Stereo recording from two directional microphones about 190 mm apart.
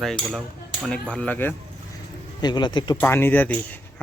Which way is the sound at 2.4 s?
25° left (ahead or behind).